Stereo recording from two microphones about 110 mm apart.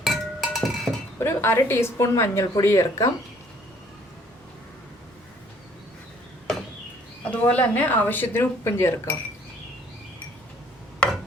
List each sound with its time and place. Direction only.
0.0 s chink: centre (ahead or behind)
1.2 s a woman's voice: 20° left (ahead or behind)
7.3 s speech: 15° left (ahead or behind)